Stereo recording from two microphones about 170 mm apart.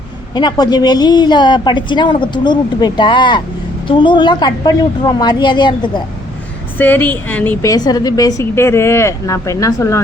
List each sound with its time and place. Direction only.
0.3 s a woman's voice: 25° left (ahead or behind)
6.7 s a woman's voice: 10° left (ahead or behind)